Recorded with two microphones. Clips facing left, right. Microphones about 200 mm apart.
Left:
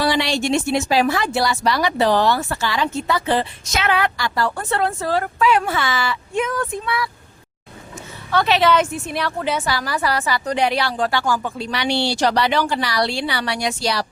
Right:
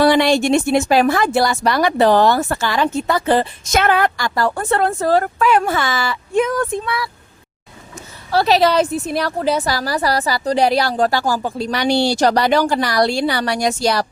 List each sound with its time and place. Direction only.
0.0 s a woman's voice: 55° right (ahead or behind); by 7.1 s 35° right (ahead or behind)
8.3 s a woman's voice: 35° right (ahead or behind)